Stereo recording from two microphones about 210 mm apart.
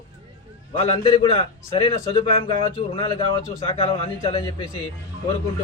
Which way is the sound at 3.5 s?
25° left (ahead or behind).